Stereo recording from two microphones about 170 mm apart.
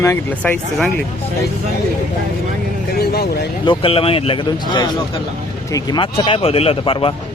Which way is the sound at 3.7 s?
35° left (ahead or behind).